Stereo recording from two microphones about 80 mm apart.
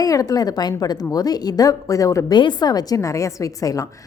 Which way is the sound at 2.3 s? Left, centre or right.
Left.